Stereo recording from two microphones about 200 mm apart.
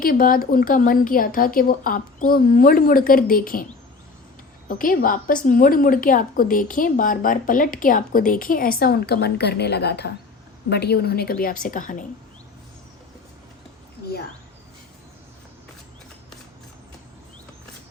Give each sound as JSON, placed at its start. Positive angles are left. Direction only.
{"t": 0.0, "sound": "a woman's voice", "side_deg": 45}
{"t": 4.8, "sound": "a woman's voice", "side_deg": 45}